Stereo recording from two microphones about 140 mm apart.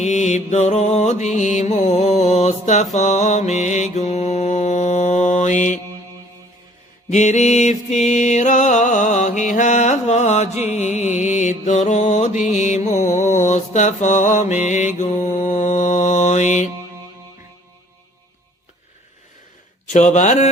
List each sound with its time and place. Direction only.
0.0 s music: 55° left (ahead or behind)
7.1 s music: 60° left (ahead or behind)
14.9 s mantra: 60° left (ahead or behind)
19.9 s music: 55° left (ahead or behind)